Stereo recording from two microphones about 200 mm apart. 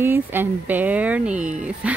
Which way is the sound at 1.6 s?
5° right (ahead or behind).